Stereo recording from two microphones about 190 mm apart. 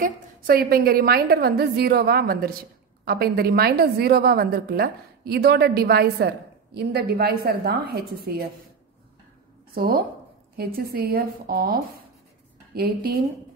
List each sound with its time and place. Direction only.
0.0 s a woman's voice: 50° right (ahead or behind)
9.8 s a woman's voice: 50° right (ahead or behind)